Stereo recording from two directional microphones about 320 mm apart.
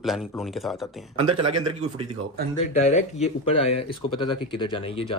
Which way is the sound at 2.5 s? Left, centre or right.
Left.